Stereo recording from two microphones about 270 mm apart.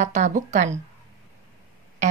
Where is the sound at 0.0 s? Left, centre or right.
Right.